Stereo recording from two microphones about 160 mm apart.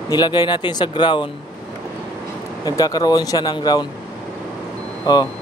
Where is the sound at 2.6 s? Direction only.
25° left (ahead or behind).